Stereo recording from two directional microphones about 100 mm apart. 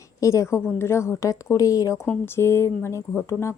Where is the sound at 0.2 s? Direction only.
30° left (ahead or behind).